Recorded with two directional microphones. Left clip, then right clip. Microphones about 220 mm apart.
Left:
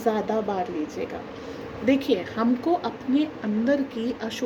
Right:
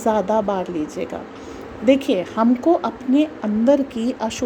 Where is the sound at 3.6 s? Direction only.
30° right (ahead or behind).